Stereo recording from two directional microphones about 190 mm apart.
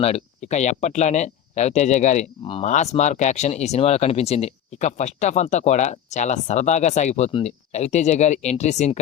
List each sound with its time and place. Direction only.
0.0 s speech: 35° left (ahead or behind)